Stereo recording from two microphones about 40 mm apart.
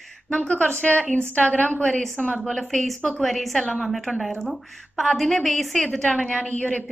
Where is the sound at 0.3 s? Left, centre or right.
Left.